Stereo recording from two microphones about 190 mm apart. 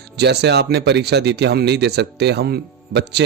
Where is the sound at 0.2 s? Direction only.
60° right (ahead or behind).